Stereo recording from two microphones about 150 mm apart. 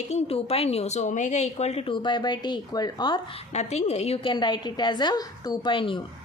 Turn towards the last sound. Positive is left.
turn(degrees=35)  # may be behind; listen again after turning